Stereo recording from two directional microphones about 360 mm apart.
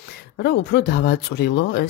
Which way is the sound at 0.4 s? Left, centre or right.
Left.